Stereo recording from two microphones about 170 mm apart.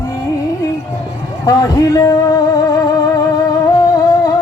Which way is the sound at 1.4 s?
20° left (ahead or behind).